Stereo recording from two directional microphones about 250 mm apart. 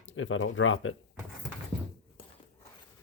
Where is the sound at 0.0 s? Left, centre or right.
Left.